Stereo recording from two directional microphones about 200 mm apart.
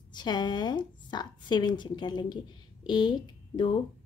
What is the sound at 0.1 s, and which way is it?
A woman's voice, 20° left (ahead or behind).